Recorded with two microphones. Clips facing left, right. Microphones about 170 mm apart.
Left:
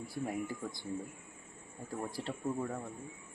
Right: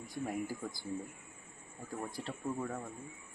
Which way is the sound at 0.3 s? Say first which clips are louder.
Right 1 dB; centre (ahead or behind).